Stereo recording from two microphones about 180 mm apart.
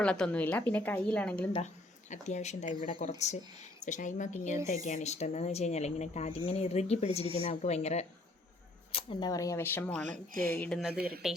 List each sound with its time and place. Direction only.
0.0 s speech: 5° left (ahead or behind)
1.5 s a woman's voice: 40° left (ahead or behind); by 10.0 s 10° left (ahead or behind)
10.1 s speech: 50° right (ahead or behind)
10.6 s speech: centre (ahead or behind)
10.9 s a woman's voice: 60° right (ahead or behind)